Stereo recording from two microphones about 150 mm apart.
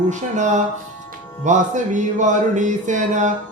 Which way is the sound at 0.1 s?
55° right (ahead or behind).